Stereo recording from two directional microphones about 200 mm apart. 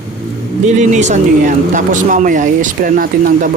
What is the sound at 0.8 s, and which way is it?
Speech, 35° right (ahead or behind).